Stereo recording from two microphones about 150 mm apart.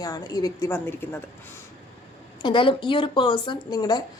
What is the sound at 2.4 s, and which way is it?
Speech, 30° left (ahead or behind).